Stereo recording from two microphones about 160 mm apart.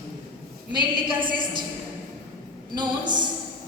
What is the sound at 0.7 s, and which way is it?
Speech, 30° right (ahead or behind).